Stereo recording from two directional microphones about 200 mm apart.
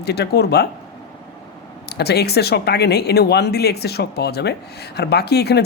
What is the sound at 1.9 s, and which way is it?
Speech, 55° left (ahead or behind).